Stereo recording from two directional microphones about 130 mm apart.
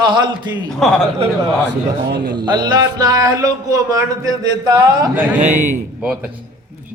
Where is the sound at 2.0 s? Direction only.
35° right (ahead or behind).